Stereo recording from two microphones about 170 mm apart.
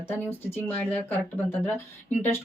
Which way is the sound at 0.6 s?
10° left (ahead or behind).